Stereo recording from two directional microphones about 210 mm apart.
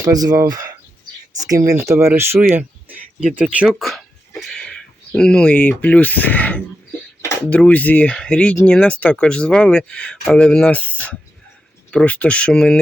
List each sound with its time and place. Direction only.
0.0 s speech: 15° right (ahead or behind); by 12.8 s 5° left (ahead or behind)